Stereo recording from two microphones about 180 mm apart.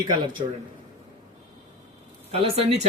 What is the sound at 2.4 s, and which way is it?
Speech, 35° right (ahead or behind).